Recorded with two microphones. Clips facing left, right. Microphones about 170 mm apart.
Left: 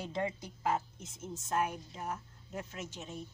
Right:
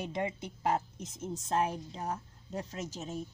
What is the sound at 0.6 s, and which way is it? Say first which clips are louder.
A woman's voice: right 2 dB; 35° right (ahead or behind).